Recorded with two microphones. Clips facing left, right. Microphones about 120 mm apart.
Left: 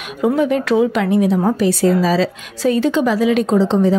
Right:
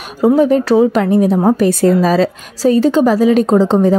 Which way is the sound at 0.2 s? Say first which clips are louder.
Right 5 dB; 35° right (ahead or behind).